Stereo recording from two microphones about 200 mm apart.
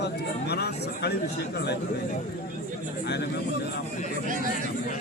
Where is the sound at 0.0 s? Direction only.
55° left (ahead or behind).